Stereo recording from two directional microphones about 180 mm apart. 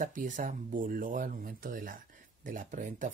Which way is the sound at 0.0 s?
45° right (ahead or behind).